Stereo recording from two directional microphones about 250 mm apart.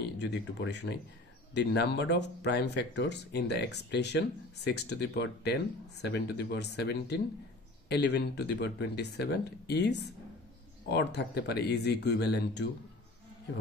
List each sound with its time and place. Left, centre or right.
0.2 s speech: left